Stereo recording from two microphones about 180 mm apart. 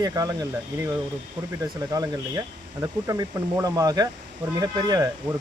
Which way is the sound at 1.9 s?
20° right (ahead or behind).